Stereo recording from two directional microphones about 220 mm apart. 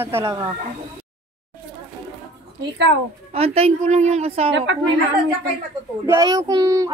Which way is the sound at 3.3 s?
25° right (ahead or behind).